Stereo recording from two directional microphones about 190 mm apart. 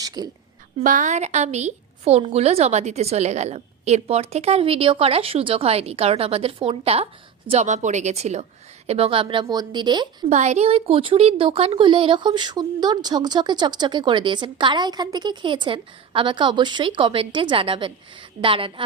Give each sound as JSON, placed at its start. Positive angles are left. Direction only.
{"t": 0.0, "sound": "a sound", "side_deg": -20}
{"t": 0.8, "sound": "a woman's voice", "side_deg": -40}
{"t": 10.2, "sound": "speech", "side_deg": -40}